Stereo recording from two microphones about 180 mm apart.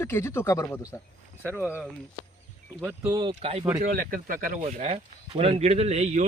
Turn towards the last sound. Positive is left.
turn(degrees=-40)  # may be behind; listen again after turning